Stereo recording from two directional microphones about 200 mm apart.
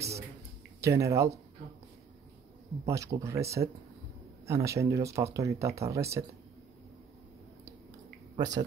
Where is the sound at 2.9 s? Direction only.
15° right (ahead or behind).